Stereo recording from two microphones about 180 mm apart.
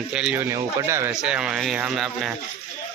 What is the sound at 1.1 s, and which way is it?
Speech, 5° right (ahead or behind).